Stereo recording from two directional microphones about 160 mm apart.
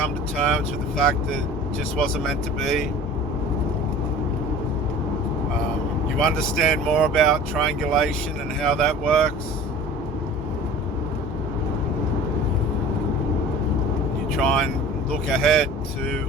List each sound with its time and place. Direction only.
0.9 s speech: 5° left (ahead or behind)
6.1 s speech: 5° left (ahead or behind)
14.3 s speech: 5° left (ahead or behind)